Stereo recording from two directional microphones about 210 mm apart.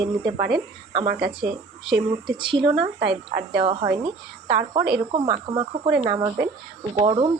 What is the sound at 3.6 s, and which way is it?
Speech, 25° right (ahead or behind).